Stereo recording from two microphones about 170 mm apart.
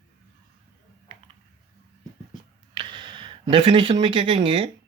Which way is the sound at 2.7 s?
30° right (ahead or behind).